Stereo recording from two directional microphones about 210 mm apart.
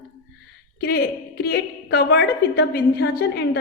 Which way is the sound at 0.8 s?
50° left (ahead or behind).